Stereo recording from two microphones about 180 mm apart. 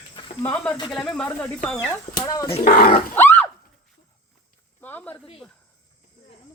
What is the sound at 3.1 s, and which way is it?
Grunt, 10° left (ahead or behind).